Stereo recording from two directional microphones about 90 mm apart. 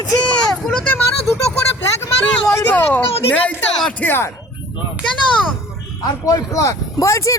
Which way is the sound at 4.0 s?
25° left (ahead or behind).